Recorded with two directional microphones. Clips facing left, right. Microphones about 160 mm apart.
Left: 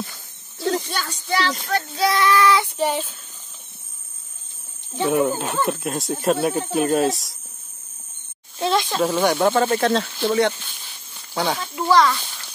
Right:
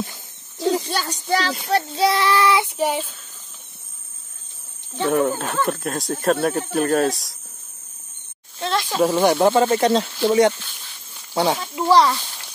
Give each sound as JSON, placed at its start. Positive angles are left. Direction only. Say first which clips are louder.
{"t": 0.1, "sound": "a sound", "louder": "right 2 dB", "side_deg": -15}
{"t": 1.1, "sound": "speech", "louder": "even", "side_deg": -40}
{"t": 1.7, "sound": "child singing", "louder": "right 5 dB", "side_deg": -30}
{"t": 2.8, "sound": "speech", "louder": "even", "side_deg": -10}
{"t": 4.9, "sound": "speech", "louder": "even", "side_deg": 5}
{"t": 8.5, "sound": "speech", "louder": "left 2 dB", "side_deg": 0}
{"t": 9.0, "sound": "speech", "louder": "right 4 dB", "side_deg": -10}
{"t": 11.5, "sound": "child singing", "louder": "right 1 dB", "side_deg": -20}
{"t": 11.9, "sound": "speech", "louder": "right 1 dB", "side_deg": -30}